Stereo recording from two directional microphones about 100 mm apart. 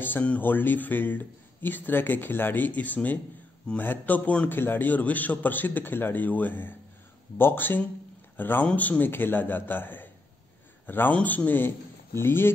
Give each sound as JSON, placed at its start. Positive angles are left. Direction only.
{"t": 0.0, "sound": "a man's voice", "side_deg": 15}